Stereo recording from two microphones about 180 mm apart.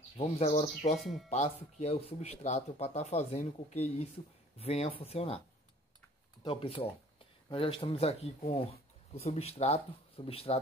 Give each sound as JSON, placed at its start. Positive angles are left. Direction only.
{"t": 0.2, "sound": "speech", "side_deg": 35}
{"t": 0.9, "sound": "speech", "side_deg": 0}
{"t": 1.3, "sound": "speech", "side_deg": 35}
{"t": 6.4, "sound": "speech", "side_deg": 30}